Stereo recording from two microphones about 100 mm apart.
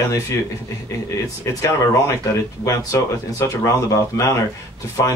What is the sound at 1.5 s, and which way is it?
Speech, 30° left (ahead or behind).